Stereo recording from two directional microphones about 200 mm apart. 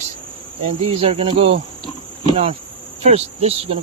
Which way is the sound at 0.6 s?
30° right (ahead or behind).